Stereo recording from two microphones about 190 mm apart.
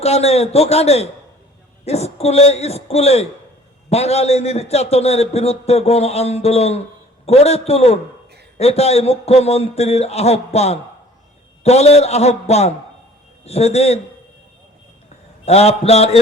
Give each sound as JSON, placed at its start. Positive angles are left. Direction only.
{"t": 0.0, "sound": "a man's voice", "side_deg": 35}
{"t": 15.4, "sound": "a man's voice", "side_deg": 35}